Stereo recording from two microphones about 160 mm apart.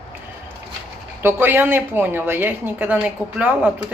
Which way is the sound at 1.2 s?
10° right (ahead or behind).